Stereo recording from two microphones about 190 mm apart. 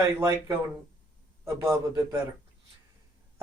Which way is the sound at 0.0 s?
15° right (ahead or behind).